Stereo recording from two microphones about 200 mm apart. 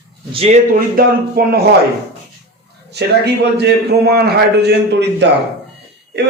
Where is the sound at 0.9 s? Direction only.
50° right (ahead or behind).